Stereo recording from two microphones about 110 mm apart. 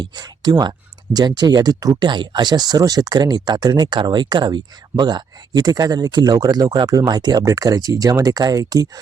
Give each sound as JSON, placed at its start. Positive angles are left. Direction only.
{"t": 0.0, "sound": "speech", "side_deg": -40}